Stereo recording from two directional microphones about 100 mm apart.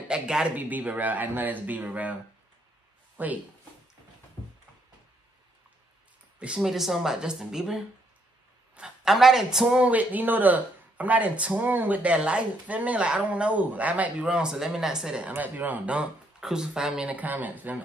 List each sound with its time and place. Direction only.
0.1 s speech: 10° right (ahead or behind)
3.2 s speech: 15° right (ahead or behind)
6.4 s speech: 5° right (ahead or behind)